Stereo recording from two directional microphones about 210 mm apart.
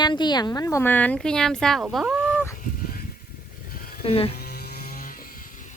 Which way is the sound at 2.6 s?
40° left (ahead or behind).